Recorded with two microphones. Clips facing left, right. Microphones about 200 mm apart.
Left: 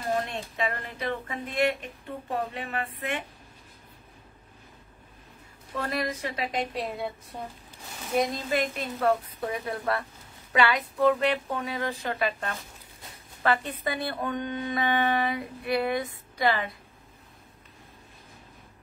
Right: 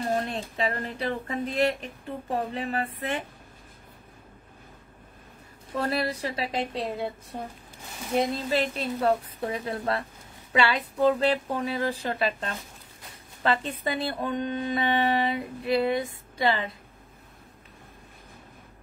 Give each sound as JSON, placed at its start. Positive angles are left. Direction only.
{"t": 0.1, "sound": "speech", "side_deg": -30}
{"t": 5.8, "sound": "speech", "side_deg": -30}
{"t": 8.5, "sound": "speech", "side_deg": -30}